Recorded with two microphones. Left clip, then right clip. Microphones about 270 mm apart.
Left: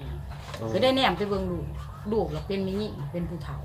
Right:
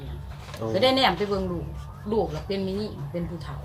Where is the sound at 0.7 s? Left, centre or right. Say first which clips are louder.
Right 2 dB; centre.